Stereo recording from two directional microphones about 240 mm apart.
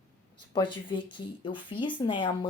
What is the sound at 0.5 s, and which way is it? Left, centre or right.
Speech, centre.